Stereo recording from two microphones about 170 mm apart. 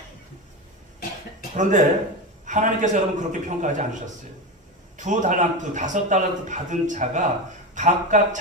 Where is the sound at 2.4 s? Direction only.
45° right (ahead or behind).